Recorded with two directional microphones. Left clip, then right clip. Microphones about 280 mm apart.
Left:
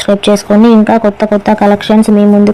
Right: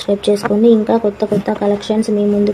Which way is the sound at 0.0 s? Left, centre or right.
Left.